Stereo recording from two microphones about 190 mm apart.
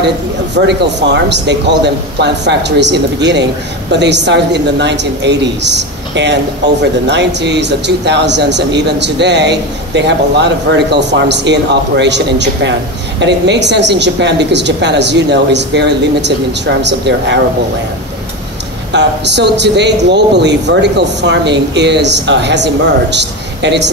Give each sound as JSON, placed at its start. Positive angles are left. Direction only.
{"t": 0.6, "sound": "a woman's voice", "side_deg": -65}
{"t": 18.9, "sound": "a woman's voice", "side_deg": -65}